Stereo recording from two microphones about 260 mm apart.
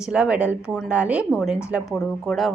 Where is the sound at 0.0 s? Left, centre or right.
Centre.